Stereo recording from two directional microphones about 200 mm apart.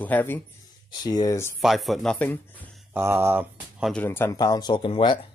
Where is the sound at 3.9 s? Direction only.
10° left (ahead or behind); by 5.1 s 25° left (ahead or behind).